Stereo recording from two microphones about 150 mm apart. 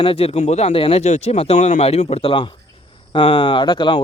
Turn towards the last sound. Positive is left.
turn(degrees=30)  # may be behind; listen again after turning